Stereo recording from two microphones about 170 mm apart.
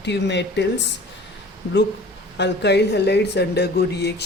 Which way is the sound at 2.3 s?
90° left.